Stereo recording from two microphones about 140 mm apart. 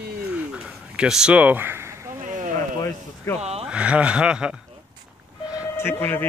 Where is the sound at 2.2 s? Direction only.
65° right (ahead or behind).